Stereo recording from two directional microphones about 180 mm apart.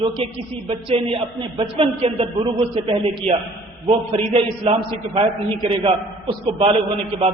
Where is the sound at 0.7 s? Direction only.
30° right (ahead or behind).